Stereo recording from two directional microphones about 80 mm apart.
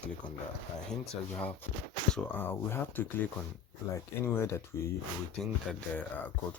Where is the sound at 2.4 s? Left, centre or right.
Left.